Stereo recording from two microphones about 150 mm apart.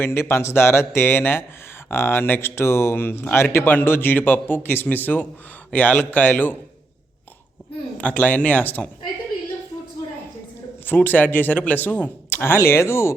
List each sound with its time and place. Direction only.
0.0 s speech: 15° left (ahead or behind)
7.9 s speech: 10° left (ahead or behind)
10.8 s speech: 10° left (ahead or behind)